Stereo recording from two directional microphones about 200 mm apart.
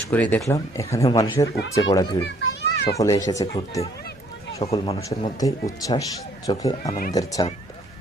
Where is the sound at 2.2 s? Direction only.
60° left (ahead or behind).